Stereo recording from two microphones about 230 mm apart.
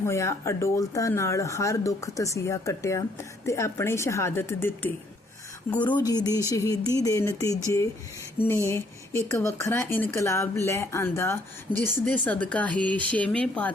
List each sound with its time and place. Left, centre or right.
0.0 s speech: centre